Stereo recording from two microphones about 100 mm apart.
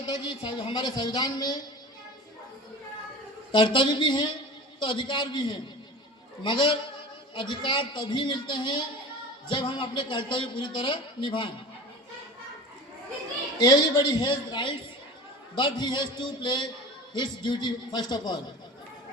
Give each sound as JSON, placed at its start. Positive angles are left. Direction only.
{"t": 0.0, "sound": "a woman's voice", "side_deg": 70}
{"t": 3.5, "sound": "a man's voice", "side_deg": 55}
{"t": 13.7, "sound": "a woman's voice", "side_deg": 50}